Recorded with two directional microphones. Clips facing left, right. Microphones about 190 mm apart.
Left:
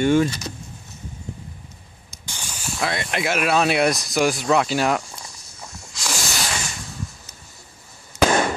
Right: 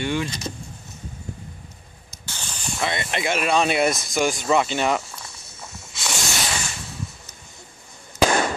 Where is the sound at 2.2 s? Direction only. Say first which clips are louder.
Even; 10° left (ahead or behind).